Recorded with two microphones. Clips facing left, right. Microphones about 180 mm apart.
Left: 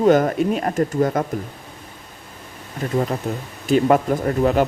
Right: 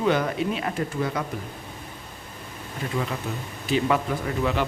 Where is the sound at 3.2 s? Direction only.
40° left (ahead or behind).